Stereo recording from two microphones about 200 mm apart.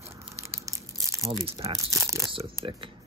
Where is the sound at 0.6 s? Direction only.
15° right (ahead or behind).